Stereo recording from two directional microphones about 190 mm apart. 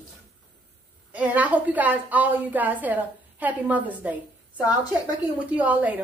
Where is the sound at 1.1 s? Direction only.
5° right (ahead or behind).